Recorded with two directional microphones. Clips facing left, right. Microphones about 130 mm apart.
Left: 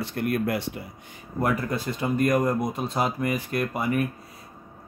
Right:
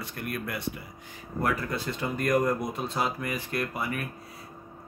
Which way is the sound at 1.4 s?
15° left (ahead or behind).